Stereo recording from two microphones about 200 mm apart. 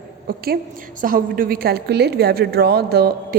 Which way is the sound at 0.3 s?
50° right (ahead or behind).